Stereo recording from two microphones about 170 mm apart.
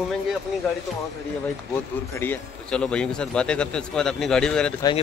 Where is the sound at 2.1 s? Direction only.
10° left (ahead or behind).